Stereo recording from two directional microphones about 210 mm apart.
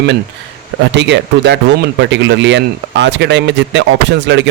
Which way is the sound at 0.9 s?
55° right (ahead or behind).